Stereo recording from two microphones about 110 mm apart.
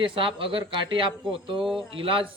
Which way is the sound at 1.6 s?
5° right (ahead or behind).